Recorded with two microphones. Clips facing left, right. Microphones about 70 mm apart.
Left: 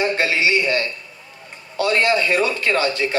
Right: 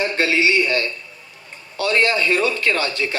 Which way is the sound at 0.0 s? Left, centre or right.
Left.